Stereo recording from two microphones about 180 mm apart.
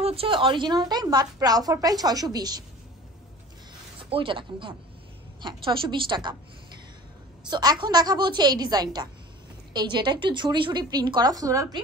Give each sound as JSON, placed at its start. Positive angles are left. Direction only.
{"t": 0.0, "sound": "a woman's voice", "side_deg": -30}
{"t": 4.0, "sound": "a woman's voice", "side_deg": -30}
{"t": 7.4, "sound": "a woman's voice", "side_deg": -25}